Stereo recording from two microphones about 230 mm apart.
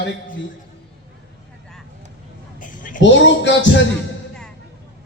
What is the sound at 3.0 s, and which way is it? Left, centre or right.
Speech, left.